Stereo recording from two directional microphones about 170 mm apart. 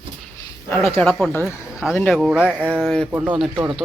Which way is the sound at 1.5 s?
5° right (ahead or behind).